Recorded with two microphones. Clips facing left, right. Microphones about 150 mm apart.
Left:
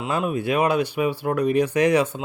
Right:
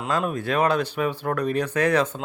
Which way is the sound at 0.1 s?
10° left (ahead or behind).